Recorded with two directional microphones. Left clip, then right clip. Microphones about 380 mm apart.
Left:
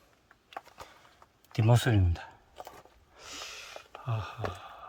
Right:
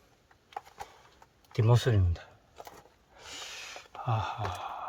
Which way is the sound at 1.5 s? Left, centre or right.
Centre.